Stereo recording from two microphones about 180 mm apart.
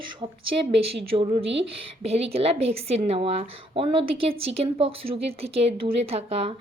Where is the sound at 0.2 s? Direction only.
25° right (ahead or behind).